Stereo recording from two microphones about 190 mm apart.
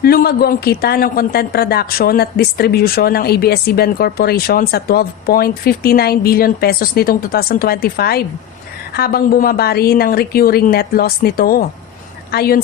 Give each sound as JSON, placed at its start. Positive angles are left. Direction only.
{"t": 0.0, "sound": "speech", "side_deg": 55}